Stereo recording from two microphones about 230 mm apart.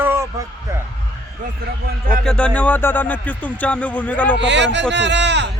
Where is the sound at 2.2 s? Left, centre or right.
Centre.